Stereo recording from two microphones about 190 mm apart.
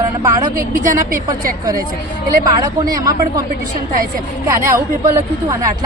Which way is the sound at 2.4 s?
20° right (ahead or behind).